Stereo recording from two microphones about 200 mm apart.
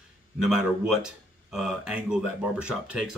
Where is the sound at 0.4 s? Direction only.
Centre (ahead or behind).